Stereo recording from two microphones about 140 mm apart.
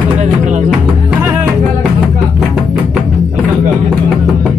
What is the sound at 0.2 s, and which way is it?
Music, 60° right (ahead or behind).